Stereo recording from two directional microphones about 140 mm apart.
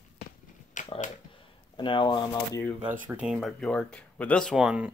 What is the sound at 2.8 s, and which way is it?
Speech, 10° right (ahead or behind).